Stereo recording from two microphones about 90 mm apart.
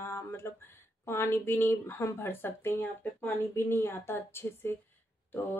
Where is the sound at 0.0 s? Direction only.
30° left (ahead or behind).